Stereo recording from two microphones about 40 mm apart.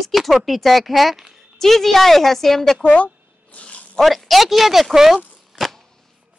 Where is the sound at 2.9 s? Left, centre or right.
Left.